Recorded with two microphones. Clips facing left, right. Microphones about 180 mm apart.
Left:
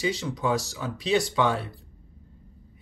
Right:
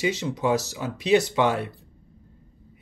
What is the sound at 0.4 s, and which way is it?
Speech, 20° right (ahead or behind).